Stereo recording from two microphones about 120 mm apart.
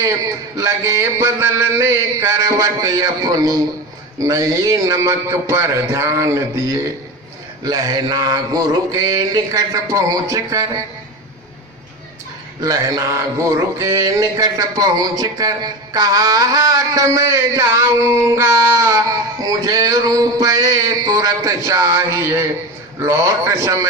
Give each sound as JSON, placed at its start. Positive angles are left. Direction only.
{"t": 0.5, "sound": "mantra", "side_deg": -25}
{"t": 12.6, "sound": "mantra", "side_deg": -30}